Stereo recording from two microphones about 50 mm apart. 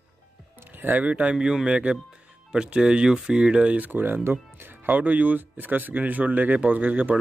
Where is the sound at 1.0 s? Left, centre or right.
Right.